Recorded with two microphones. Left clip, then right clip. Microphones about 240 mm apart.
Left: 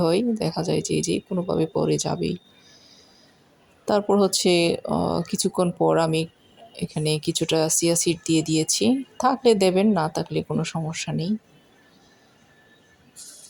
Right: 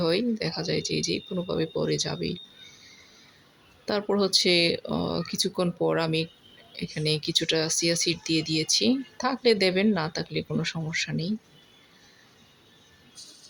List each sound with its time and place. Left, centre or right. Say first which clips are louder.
0.0 s speech: left 4 dB; centre